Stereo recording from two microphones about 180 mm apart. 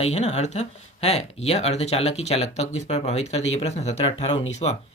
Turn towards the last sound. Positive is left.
turn(degrees=35)  # may be behind; listen again after turning